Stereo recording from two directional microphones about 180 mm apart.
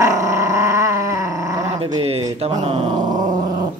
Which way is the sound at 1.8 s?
35° right (ahead or behind).